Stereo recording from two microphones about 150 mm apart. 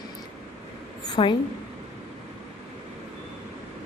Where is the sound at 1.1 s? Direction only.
30° left (ahead or behind).